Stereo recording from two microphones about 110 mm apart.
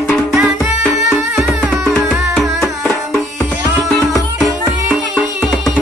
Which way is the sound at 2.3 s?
5° left (ahead or behind).